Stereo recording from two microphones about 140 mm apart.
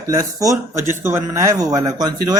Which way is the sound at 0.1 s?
25° right (ahead or behind).